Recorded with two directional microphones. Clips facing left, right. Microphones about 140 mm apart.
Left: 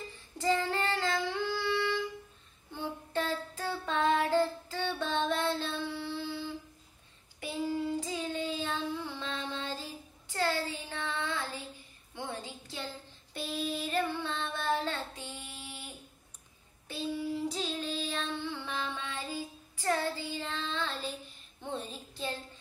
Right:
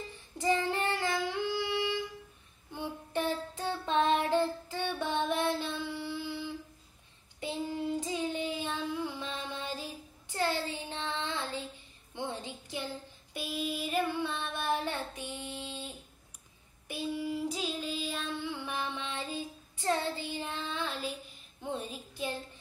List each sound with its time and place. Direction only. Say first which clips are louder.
0.4 s child singing: even; 20° right (ahead or behind)
7.3 s child singing: left 2 dB; 20° right (ahead or behind)
12.2 s female singing: right 2 dB; 20° right (ahead or behind)
16.8 s child singing: even; 15° right (ahead or behind)